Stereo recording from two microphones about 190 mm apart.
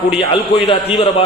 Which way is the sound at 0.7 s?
30° left (ahead or behind).